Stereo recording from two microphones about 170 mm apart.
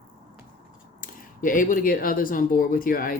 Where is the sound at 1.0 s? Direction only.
55° left (ahead or behind).